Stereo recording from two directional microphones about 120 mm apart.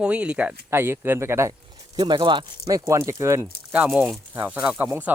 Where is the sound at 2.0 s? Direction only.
40° right (ahead or behind).